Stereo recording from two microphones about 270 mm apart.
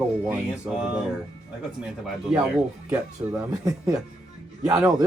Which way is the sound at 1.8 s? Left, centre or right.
Centre.